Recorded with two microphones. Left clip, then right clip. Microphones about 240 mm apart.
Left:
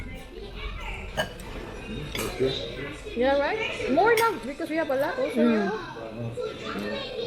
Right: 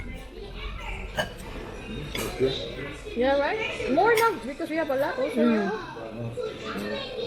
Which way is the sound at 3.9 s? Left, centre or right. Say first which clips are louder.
Even; left.